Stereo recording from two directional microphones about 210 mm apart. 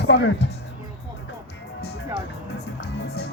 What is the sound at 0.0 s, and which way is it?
Speech, 55° left (ahead or behind).